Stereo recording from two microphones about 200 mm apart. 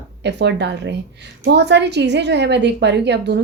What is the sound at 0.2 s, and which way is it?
A woman's voice, 60° right (ahead or behind).